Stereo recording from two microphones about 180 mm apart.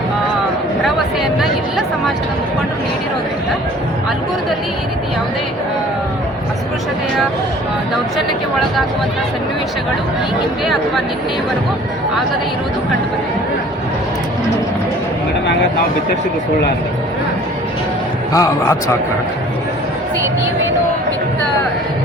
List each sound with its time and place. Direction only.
18.3 s a man's voice: 15° left (ahead or behind)